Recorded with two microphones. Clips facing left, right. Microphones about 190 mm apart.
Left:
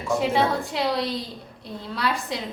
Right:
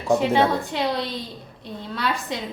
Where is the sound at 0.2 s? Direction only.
Centre (ahead or behind).